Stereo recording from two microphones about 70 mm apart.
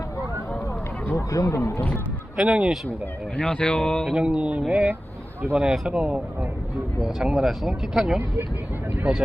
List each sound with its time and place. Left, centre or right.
1.1 s speech: left
2.3 s speech: centre
3.3 s speech: centre
4.1 s speech: centre